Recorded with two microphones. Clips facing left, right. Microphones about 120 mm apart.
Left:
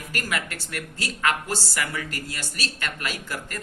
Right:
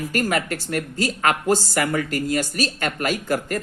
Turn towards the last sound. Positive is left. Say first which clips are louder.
# right 10 dB
turn(degrees=-45)  # may be behind; listen again after turning